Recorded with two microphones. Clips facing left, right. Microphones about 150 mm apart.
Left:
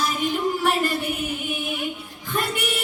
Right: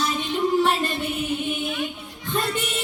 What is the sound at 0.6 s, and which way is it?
Music, 25° right (ahead or behind).